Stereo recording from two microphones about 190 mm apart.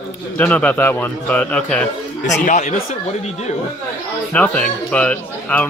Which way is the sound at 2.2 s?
40° left (ahead or behind).